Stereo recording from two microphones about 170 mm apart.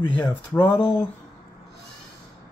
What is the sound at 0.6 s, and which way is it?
Speech, 25° left (ahead or behind).